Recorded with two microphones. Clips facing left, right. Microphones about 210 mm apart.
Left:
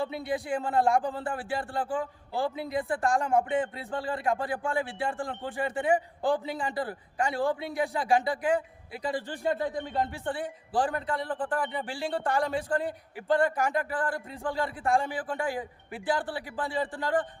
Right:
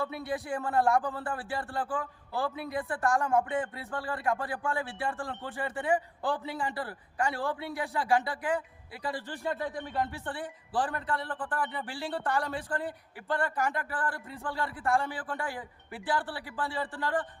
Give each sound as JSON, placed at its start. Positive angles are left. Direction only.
{"t": 0.1, "sound": "a man's voice", "side_deg": 15}
{"t": 10.3, "sound": "a man's voice", "side_deg": 15}